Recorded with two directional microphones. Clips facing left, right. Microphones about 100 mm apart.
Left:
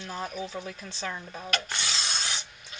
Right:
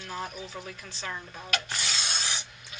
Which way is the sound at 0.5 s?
30° left (ahead or behind).